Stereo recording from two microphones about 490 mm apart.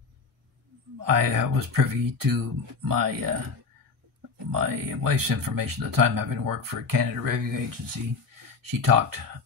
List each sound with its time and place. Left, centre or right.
0.9 s speech: right
4.5 s speech: right